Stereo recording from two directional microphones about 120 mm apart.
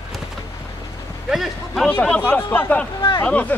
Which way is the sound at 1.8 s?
10° left (ahead or behind).